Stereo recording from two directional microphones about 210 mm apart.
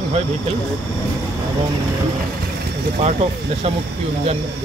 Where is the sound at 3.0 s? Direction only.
30° right (ahead or behind).